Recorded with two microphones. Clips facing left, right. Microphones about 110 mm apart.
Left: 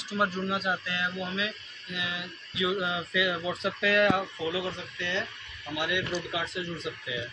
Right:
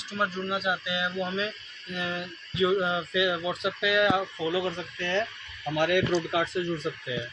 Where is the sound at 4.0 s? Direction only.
Centre (ahead or behind).